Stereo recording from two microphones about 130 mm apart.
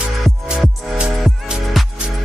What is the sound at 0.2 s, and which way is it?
Music, centre (ahead or behind).